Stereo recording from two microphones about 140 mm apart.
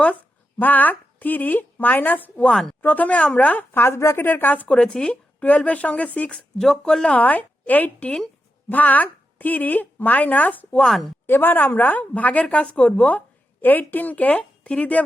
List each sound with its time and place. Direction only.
0.6 s a woman's voice: 10° left (ahead or behind)